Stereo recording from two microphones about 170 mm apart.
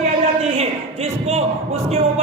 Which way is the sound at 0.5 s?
40° right (ahead or behind).